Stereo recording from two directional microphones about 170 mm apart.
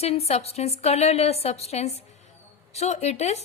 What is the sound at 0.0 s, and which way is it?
A woman's voice, 35° left (ahead or behind).